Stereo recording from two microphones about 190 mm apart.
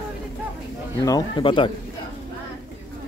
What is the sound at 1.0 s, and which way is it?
Speech, 20° left (ahead or behind).